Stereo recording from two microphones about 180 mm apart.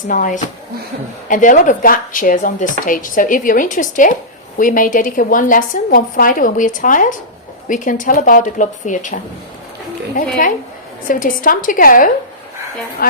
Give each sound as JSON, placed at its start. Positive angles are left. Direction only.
{"t": 0.1, "sound": "speech", "side_deg": 45}
{"t": 11.1, "sound": "speech", "side_deg": 50}